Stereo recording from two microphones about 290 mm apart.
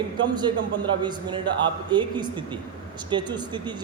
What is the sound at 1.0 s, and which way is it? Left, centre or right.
A man's voice, centre.